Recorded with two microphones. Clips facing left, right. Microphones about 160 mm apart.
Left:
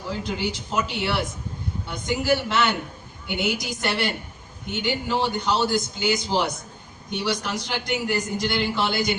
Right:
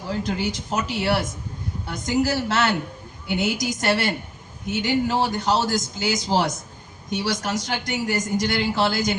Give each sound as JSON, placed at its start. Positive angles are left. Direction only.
{"t": 0.3, "sound": "a man's voice", "side_deg": -40}